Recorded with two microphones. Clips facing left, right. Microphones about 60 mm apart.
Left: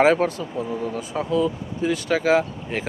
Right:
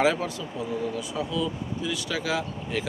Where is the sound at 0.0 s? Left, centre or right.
Left.